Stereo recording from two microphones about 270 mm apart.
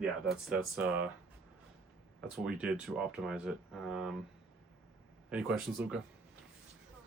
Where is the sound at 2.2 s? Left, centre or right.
Centre.